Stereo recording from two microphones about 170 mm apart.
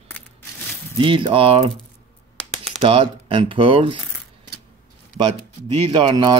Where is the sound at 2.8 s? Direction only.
30° right (ahead or behind).